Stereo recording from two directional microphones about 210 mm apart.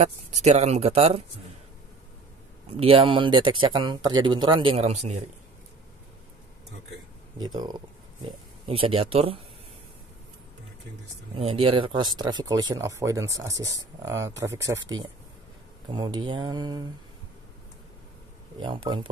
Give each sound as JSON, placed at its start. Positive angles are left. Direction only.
{"t": 0.0, "sound": "speech", "side_deg": -30}
{"t": 2.8, "sound": "speech", "side_deg": -25}
{"t": 7.3, "sound": "speech", "side_deg": -20}
{"t": 11.3, "sound": "speech", "side_deg": -25}
{"t": 18.6, "sound": "speech", "side_deg": -20}